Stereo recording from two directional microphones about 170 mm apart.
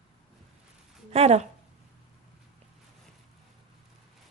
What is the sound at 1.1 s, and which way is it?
Speech, 40° right (ahead or behind).